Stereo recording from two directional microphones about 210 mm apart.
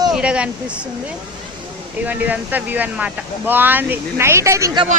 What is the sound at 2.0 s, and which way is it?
Speech, 10° right (ahead or behind).